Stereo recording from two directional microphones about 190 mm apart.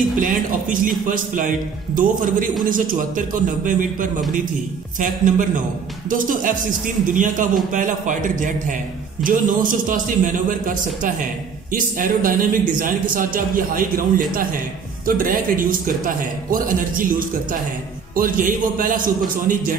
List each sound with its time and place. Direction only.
0.2 s a man's voice: 45° right (ahead or behind)